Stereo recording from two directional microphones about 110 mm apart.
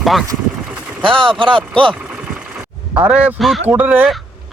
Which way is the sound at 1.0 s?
50° right (ahead or behind).